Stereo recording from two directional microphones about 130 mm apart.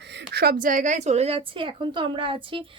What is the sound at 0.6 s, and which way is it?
A woman's voice, 80° right.